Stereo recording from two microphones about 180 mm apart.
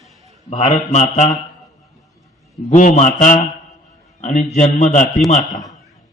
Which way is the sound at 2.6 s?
40° left (ahead or behind).